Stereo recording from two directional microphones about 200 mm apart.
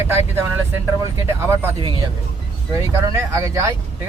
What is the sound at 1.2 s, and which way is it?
Speech, 15° right (ahead or behind).